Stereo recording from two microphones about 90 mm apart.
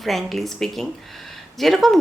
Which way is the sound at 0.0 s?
Centre (ahead or behind).